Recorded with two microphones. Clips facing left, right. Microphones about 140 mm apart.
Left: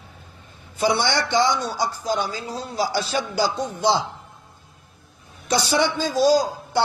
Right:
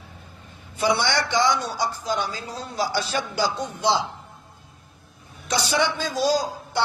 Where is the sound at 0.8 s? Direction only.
35° left (ahead or behind).